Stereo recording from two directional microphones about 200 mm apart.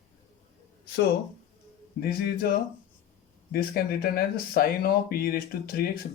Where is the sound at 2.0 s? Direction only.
50° left (ahead or behind).